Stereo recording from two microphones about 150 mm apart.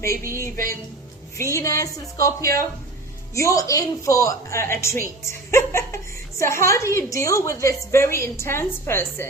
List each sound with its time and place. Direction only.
0.3 s a woman's voice: 20° left (ahead or behind)
5.2 s laughter: 20° left (ahead or behind)
6.4 s a woman's voice: 20° left (ahead or behind)